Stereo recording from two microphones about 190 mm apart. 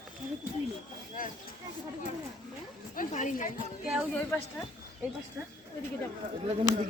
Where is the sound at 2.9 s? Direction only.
45° left (ahead or behind).